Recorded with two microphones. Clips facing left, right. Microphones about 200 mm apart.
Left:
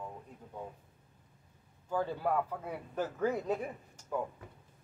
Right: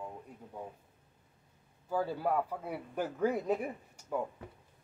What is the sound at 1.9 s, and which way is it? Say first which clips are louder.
A man's voice: even; 10° right (ahead or behind).